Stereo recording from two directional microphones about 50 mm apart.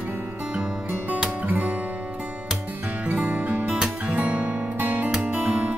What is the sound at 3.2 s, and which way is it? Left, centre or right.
Music, right.